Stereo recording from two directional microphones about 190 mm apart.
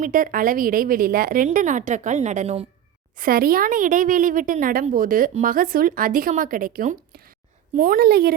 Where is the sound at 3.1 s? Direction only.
50° right (ahead or behind).